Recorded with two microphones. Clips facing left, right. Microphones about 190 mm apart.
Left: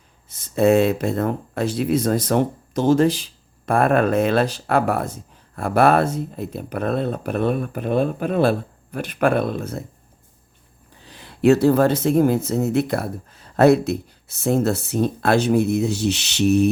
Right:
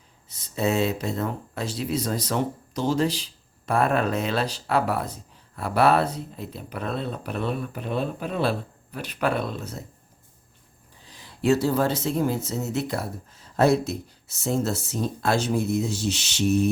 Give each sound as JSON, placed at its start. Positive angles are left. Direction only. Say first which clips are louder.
{"t": 0.3, "sound": "speech", "louder": "left 9 dB", "side_deg": 50}
{"t": 11.0, "sound": "speech", "louder": "left 8 dB", "side_deg": 65}